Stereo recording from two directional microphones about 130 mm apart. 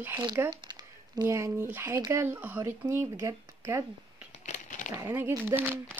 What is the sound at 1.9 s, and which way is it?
Speech, 30° right (ahead or behind).